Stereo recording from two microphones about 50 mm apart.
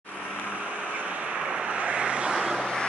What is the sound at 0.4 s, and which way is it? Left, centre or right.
Vehicle, right.